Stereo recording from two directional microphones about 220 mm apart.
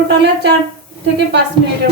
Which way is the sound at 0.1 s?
50° right (ahead or behind).